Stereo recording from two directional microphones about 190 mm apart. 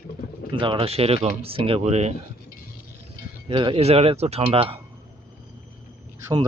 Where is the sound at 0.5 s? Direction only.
25° right (ahead or behind).